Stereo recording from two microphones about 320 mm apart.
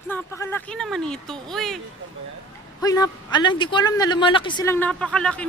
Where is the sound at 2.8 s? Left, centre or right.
Centre.